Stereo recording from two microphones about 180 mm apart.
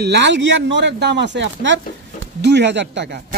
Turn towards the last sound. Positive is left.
turn(degrees=-75)  # may be behind; listen again after turning